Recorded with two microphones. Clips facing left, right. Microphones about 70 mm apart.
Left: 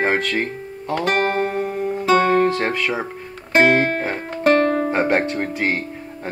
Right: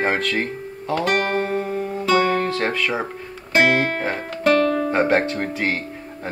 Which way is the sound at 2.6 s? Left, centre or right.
Centre.